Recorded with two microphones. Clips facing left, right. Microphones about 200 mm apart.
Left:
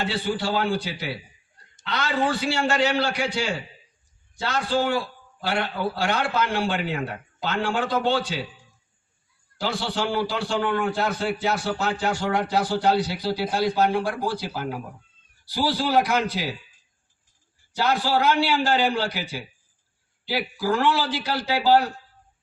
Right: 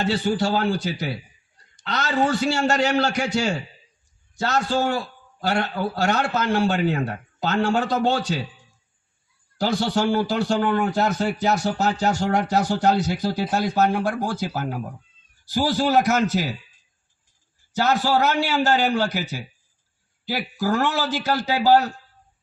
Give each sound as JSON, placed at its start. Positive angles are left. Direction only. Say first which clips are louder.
{"t": 0.0, "sound": "a man's voice", "louder": "right 4 dB", "side_deg": -45}
{"t": 9.6, "sound": "a man's voice", "louder": "right 5 dB", "side_deg": -45}
{"t": 17.7, "sound": "a man's voice", "louder": "right 2 dB", "side_deg": -45}